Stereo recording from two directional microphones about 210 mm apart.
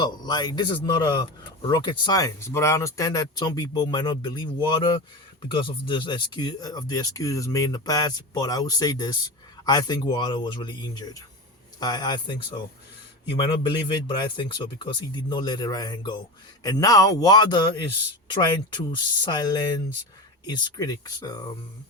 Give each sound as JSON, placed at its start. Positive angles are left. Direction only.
{"t": 0.0, "sound": "a man's voice", "side_deg": 20}
{"t": 18.7, "sound": "a man's voice", "side_deg": 20}